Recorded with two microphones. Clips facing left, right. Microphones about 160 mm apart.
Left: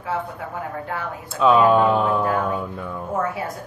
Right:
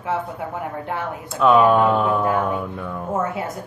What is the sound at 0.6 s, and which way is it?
Speech, 20° right (ahead or behind).